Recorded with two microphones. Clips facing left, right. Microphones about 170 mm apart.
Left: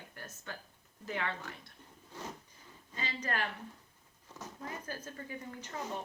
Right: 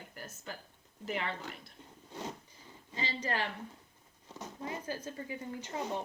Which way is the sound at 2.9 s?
25° right (ahead or behind).